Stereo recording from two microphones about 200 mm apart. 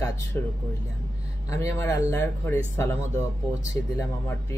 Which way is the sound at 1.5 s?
15° left (ahead or behind).